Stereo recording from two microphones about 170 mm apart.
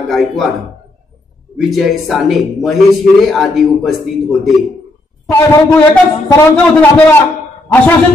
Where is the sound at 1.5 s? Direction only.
Centre (ahead or behind).